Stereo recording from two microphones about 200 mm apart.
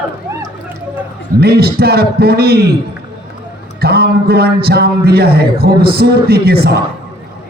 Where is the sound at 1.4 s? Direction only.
50° right (ahead or behind).